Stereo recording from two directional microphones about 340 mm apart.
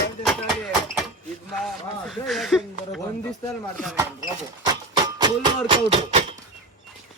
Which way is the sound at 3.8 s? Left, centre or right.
Centre.